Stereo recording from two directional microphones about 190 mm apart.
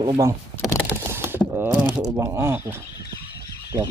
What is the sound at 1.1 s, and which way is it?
Mechanisms, 10° right (ahead or behind).